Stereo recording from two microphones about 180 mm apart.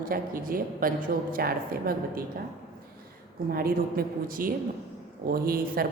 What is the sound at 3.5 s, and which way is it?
A woman's voice, 55° right (ahead or behind).